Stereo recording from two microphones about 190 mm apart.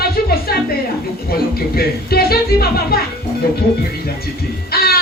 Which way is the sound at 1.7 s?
55° left (ahead or behind).